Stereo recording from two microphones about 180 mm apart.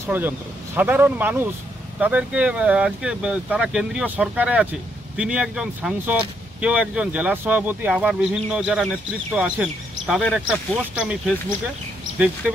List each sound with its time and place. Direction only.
0.0 s speech: 10° right (ahead or behind)